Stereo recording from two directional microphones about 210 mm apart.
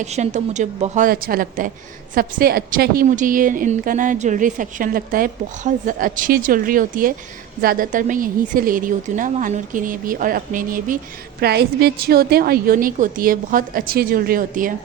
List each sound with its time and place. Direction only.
0.0 s a woman's voice: 35° right (ahead or behind)